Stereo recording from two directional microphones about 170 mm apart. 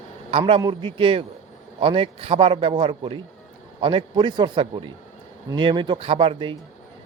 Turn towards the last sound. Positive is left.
turn(degrees=-30)  # may be behind; listen again after turning